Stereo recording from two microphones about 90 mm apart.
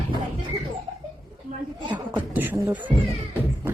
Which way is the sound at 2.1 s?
20° right (ahead or behind).